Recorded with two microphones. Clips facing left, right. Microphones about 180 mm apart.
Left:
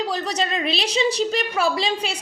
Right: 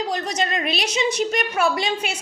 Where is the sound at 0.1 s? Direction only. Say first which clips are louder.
Even; 35° left (ahead or behind).